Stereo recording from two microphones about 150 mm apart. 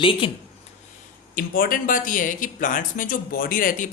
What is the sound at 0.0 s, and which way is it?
Speech, 35° left (ahead or behind).